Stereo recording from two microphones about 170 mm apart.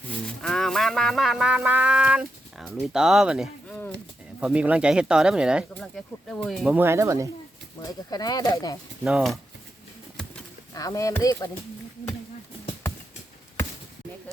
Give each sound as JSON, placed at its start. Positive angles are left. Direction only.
{"t": 0.4, "sound": "a sound", "side_deg": 0}
{"t": 2.6, "sound": "speech", "side_deg": 0}
{"t": 6.7, "sound": "speech", "side_deg": -15}
{"t": 7.8, "sound": "speech", "side_deg": 25}
{"t": 9.0, "sound": "speech", "side_deg": 0}
{"t": 10.2, "sound": "bird flight", "side_deg": 5}
{"t": 10.8, "sound": "speech", "side_deg": 20}